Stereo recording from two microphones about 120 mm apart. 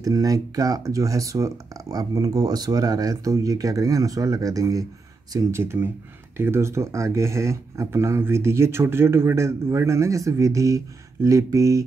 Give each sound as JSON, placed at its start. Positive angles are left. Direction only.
{"t": 0.0, "sound": "speech", "side_deg": -30}